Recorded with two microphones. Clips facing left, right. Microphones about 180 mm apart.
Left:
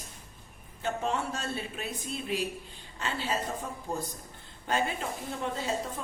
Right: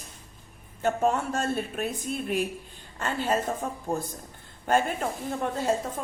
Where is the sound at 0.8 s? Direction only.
50° right (ahead or behind).